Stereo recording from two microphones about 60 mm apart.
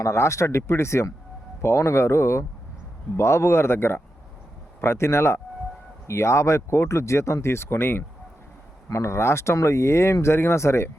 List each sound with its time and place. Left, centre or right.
0.0 s speech: left
8.9 s speech: left